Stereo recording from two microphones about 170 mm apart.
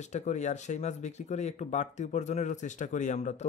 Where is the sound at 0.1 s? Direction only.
45° left (ahead or behind).